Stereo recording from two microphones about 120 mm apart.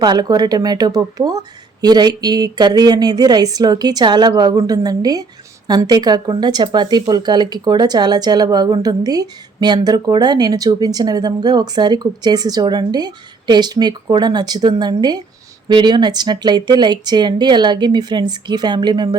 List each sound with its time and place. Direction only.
0.0 s speech: 35° right (ahead or behind)